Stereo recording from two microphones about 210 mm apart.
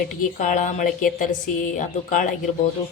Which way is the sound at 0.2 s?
40° left (ahead or behind).